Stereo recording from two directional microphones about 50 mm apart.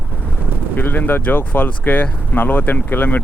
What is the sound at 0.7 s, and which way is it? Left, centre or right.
Speech, left.